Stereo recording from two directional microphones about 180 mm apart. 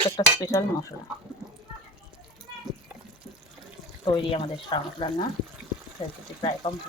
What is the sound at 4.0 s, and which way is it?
Speech, 30° left (ahead or behind).